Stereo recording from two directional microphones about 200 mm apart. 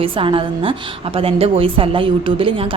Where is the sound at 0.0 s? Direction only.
25° right (ahead or behind).